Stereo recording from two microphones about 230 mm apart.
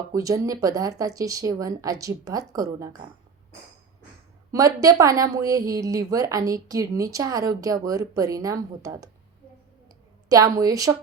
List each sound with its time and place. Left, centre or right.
0.1 s a woman's voice: centre
4.5 s a woman's voice: centre
10.2 s a woman's voice: centre